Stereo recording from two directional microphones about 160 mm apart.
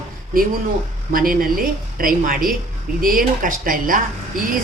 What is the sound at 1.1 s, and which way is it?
A woman's voice, 60° right (ahead or behind).